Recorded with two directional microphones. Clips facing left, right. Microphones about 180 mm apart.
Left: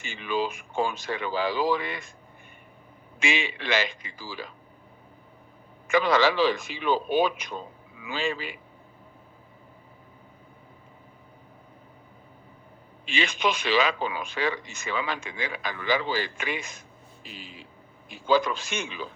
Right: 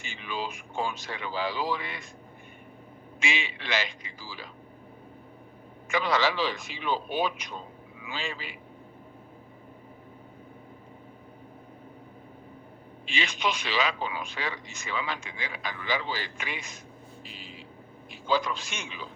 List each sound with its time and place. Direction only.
0.0 s speech: 55° left (ahead or behind)
3.2 s speech: 55° left (ahead or behind)
5.9 s a man's voice: 50° left (ahead or behind)
13.1 s speech: 55° left (ahead or behind)
18.1 s speech: 50° left (ahead or behind)